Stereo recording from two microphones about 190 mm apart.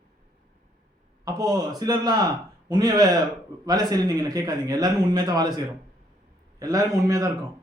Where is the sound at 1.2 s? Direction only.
20° right (ahead or behind).